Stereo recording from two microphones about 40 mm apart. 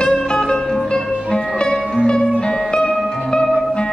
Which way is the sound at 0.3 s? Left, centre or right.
Centre.